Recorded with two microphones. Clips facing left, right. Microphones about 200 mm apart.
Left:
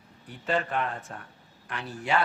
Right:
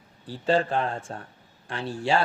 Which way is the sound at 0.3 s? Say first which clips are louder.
Right 6 dB; 30° right (ahead or behind).